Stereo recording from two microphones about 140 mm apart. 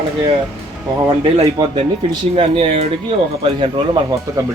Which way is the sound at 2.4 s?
40° right (ahead or behind).